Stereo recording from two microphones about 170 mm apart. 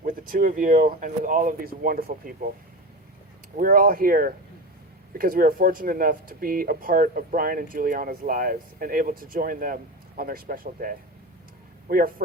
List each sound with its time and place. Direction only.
0.0 s speech: 55° right (ahead or behind)
3.6 s speech: 55° right (ahead or behind)